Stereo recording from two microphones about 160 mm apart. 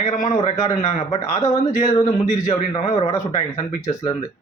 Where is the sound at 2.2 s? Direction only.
50° left (ahead or behind).